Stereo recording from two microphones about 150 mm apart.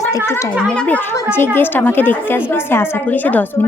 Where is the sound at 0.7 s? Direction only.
10° left (ahead or behind).